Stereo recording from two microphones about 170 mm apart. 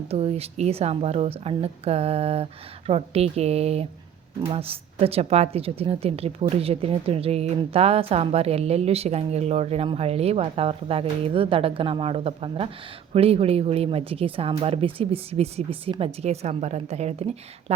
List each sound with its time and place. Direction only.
0.1 s speech: 35° right (ahead or behind)